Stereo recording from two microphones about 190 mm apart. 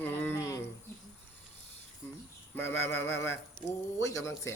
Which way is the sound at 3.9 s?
15° left (ahead or behind).